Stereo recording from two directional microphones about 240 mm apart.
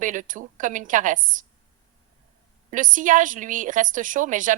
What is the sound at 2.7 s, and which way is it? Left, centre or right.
Speech, right.